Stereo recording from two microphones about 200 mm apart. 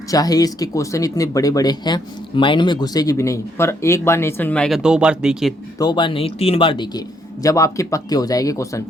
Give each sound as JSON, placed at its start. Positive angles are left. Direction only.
{"t": 0.1, "sound": "speech", "side_deg": 20}
{"t": 5.8, "sound": "speech", "side_deg": 20}